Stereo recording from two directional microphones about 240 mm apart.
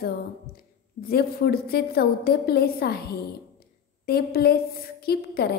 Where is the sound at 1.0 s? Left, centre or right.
Left.